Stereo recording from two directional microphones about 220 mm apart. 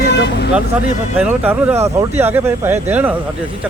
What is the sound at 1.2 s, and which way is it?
Speech, 10° right (ahead or behind).